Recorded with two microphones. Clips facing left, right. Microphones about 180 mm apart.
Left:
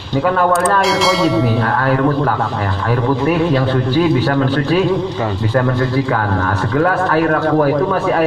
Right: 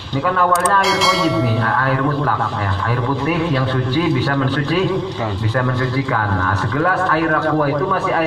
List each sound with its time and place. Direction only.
0.8 s speech: centre (ahead or behind)
1.8 s speech: 40° left (ahead or behind)
4.3 s speech: 35° left (ahead or behind)
6.7 s speech: 40° left (ahead or behind)